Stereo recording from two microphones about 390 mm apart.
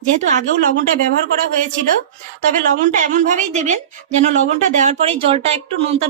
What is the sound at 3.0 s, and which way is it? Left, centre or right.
A woman's voice, centre.